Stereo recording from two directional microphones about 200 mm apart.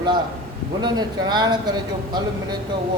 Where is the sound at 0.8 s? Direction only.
20° right (ahead or behind).